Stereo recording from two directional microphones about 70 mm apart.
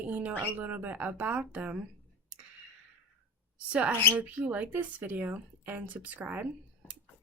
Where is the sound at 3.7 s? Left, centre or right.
Right.